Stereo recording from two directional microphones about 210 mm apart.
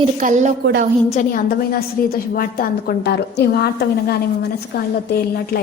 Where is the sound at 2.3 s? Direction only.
45° left (ahead or behind).